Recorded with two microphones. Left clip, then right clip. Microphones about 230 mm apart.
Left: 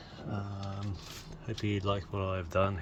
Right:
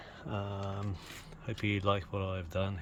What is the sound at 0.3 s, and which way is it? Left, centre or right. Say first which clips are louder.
Mantra: right 5 dB; right.